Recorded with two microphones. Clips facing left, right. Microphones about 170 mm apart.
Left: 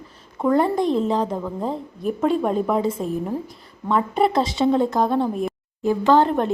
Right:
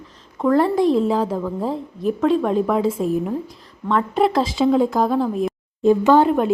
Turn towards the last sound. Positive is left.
turn(degrees=-15)  # may be behind; listen again after turning